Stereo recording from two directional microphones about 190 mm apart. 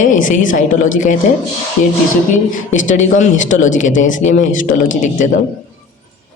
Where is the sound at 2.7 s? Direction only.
40° left (ahead or behind).